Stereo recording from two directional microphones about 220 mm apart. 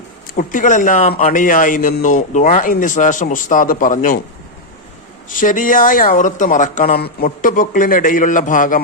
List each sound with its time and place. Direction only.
0.3 s a man's voice: 35° left (ahead or behind)
5.3 s a man's voice: 35° left (ahead or behind)